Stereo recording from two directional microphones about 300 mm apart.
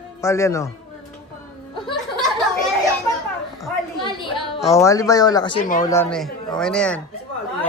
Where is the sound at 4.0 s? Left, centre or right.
Centre.